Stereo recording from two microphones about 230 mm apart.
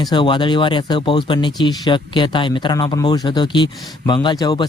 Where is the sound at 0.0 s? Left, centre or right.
Left.